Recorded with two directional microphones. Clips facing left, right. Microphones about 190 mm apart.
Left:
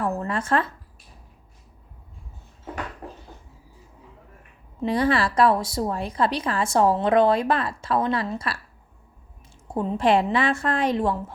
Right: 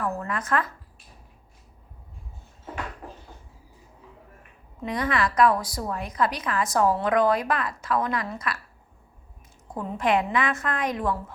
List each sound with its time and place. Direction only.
0.0 s a woman's voice: 30° left (ahead or behind)
4.8 s a woman's voice: 30° left (ahead or behind)
9.6 s a woman's voice: 25° left (ahead or behind)